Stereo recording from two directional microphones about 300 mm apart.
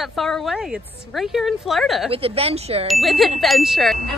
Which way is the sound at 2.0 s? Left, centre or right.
Centre.